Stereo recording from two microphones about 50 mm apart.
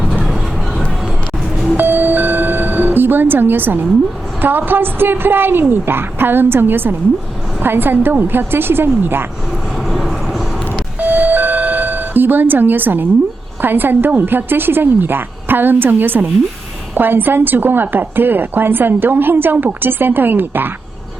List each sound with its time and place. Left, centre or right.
1.7 s music: right
4.4 s a woman's voice: right
9.9 s vehicle: centre
11.0 s doorbell: right
13.6 s a woman's voice: right